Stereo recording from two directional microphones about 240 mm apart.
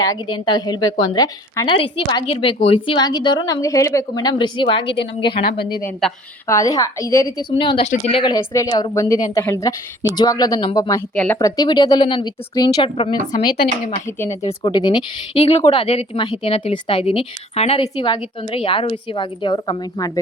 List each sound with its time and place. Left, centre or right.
0.0 s a woman's voice: centre
5.5 s a woman's voice: left
6.5 s a woman's voice: centre
11.1 s speech: centre
11.3 s a woman's voice: centre
14.2 s a woman's voice: centre